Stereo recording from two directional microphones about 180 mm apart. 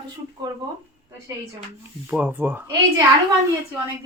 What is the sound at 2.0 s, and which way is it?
Speech, 10° right (ahead or behind).